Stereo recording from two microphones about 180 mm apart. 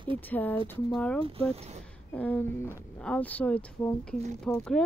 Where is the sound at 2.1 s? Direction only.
10° left (ahead or behind).